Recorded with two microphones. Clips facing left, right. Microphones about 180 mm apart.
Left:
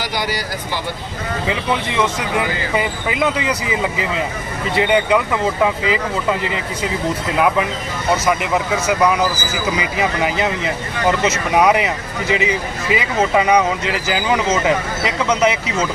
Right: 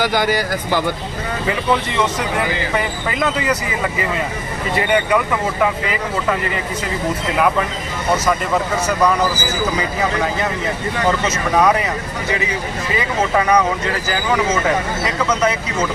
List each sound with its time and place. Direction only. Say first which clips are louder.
0.0 s speech: right 6 dB; 50° right (ahead or behind)
2.7 s speech: left 1 dB; 15° left (ahead or behind)
4.8 s speech: left 2 dB; 20° left (ahead or behind)
8.3 s speech: even; 10° left (ahead or behind)
11.5 s speech: left 1 dB; 15° left (ahead or behind)
12.9 s speech: left 2 dB; 15° left (ahead or behind)